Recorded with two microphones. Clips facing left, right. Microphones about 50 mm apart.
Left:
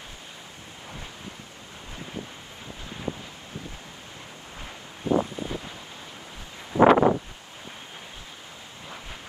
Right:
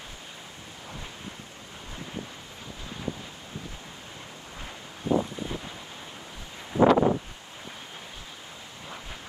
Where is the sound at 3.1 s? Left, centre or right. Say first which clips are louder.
Left 2 dB; left.